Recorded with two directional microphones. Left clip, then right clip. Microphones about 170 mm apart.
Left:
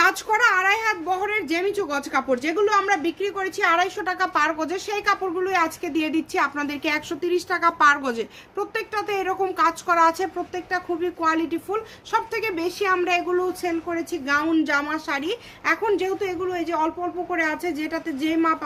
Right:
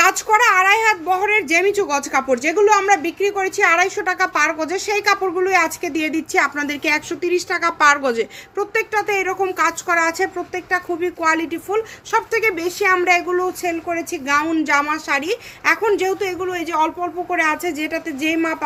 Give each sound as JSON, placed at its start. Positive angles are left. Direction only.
{"t": 0.0, "sound": "a woman's voice", "side_deg": -30}
{"t": 8.5, "sound": "a woman's voice", "side_deg": -20}